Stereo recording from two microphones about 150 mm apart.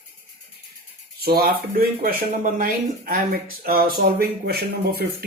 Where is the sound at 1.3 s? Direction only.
90° right.